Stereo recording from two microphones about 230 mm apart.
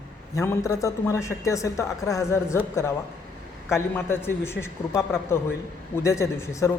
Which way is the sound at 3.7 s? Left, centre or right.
Centre.